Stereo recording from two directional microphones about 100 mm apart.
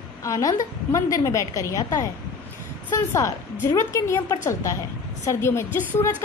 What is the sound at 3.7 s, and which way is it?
A woman's voice, 30° left (ahead or behind).